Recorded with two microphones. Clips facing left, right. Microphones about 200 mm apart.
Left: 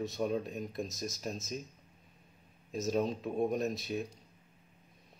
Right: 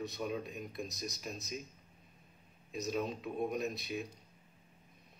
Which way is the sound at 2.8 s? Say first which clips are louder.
Left 5 dB; 40° left (ahead or behind).